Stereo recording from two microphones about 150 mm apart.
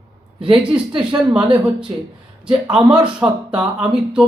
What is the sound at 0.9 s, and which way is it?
Speech, 30° right (ahead or behind).